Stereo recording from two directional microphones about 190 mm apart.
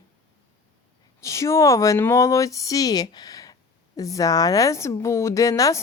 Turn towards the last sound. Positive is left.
turn(degrees=15)  # may be behind; listen again after turning